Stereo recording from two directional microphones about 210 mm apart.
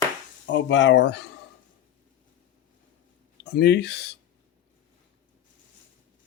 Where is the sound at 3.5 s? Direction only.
50° left (ahead or behind).